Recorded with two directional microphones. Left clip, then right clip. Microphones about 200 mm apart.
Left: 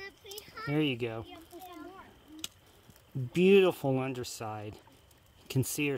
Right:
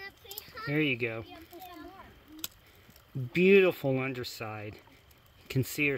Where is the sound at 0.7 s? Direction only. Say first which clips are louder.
Right 2 dB; 10° left (ahead or behind).